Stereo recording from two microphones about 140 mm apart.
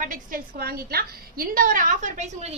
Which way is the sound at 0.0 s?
80° right.